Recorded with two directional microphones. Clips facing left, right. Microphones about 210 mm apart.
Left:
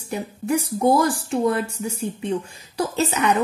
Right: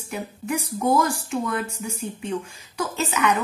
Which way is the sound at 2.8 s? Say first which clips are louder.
Left 3 dB; 35° left (ahead or behind).